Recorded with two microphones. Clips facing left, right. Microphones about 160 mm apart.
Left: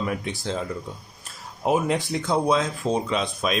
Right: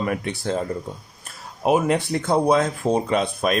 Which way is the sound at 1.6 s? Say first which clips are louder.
Right 3 dB; 65° right (ahead or behind).